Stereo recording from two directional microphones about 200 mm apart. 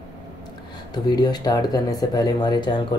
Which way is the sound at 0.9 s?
20° left (ahead or behind).